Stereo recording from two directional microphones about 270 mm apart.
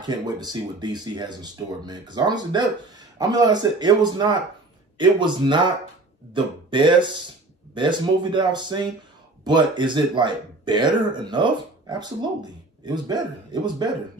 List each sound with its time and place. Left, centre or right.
0.0 s speech: centre